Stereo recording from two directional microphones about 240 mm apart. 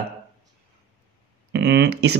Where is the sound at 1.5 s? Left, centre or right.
Right.